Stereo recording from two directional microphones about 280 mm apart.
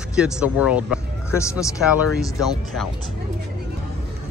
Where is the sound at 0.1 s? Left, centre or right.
Centre.